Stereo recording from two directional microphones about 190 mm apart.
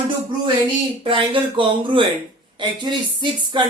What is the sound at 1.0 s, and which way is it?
Speech, 25° right (ahead or behind).